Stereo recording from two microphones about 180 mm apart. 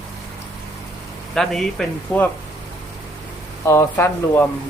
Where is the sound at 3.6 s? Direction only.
15° left (ahead or behind).